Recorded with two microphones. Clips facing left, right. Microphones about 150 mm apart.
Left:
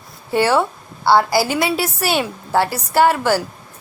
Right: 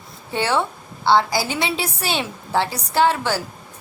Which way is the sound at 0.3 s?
10° left (ahead or behind).